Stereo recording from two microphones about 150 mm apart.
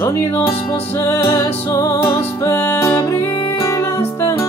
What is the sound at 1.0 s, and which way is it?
Music, 20° left (ahead or behind).